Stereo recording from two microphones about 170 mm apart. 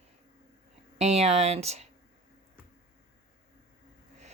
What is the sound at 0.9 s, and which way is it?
Speech, 40° right (ahead or behind).